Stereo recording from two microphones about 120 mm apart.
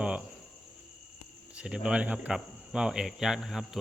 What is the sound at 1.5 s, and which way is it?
Speech, 10° right (ahead or behind).